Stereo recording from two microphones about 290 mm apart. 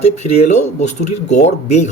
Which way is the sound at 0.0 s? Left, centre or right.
Left.